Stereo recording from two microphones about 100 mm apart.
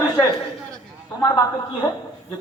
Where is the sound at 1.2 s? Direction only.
40° left (ahead or behind).